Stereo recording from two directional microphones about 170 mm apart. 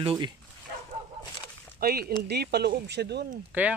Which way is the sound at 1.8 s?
65° right (ahead or behind).